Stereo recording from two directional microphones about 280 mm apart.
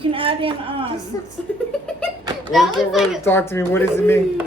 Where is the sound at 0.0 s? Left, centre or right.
Centre.